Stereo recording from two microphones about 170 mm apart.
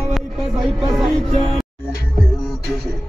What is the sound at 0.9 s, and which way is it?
Music, centre (ahead or behind).